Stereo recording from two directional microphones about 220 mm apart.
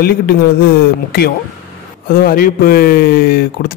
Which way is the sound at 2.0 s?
40° left (ahead or behind).